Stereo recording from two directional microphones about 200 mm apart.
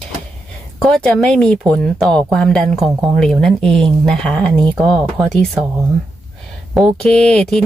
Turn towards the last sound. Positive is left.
turn(degrees=5)  # may be behind; listen again after turning